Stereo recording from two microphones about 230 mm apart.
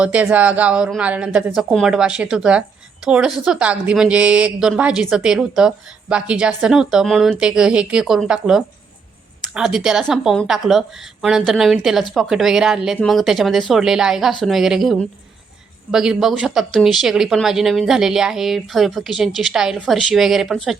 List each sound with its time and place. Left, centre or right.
0.0 s a woman's voice: centre